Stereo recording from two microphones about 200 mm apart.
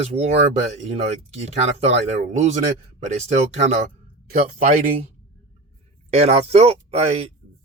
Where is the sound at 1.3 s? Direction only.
30° right (ahead or behind).